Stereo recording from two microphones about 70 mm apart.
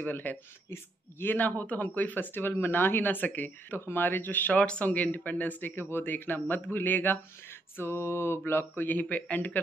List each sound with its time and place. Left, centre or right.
0.0 s speech: left
7.7 s mantra: left
8.5 s speech: left